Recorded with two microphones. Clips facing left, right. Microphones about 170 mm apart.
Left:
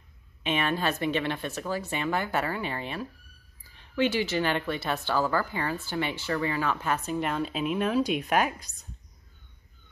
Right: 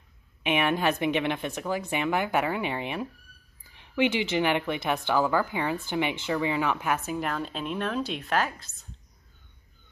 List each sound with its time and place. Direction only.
0.4 s speech: 15° right (ahead or behind)
7.2 s speech: centre (ahead or behind)